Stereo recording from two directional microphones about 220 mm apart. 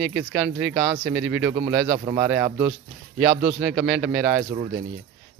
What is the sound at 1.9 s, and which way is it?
Speech, 20° right (ahead or behind).